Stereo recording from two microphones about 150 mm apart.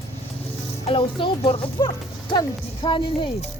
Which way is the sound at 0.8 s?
40° left (ahead or behind).